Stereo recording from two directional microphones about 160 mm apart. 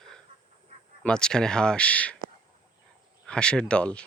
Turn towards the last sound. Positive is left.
turn(degrees=5)  # may be behind; listen again after turning